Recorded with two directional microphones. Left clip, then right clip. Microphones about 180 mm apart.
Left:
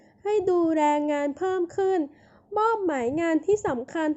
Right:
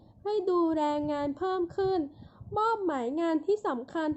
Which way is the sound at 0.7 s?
25° left (ahead or behind).